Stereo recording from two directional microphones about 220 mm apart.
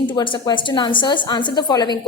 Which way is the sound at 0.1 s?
20° left (ahead or behind).